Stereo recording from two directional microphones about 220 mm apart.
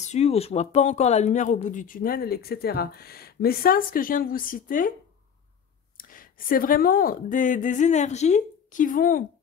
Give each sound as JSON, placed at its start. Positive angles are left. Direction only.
{"t": 0.0, "sound": "speech", "side_deg": 30}
{"t": 5.9, "sound": "speech", "side_deg": 40}